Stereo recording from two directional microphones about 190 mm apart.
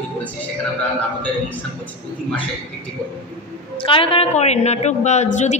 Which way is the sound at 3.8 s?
30° left (ahead or behind).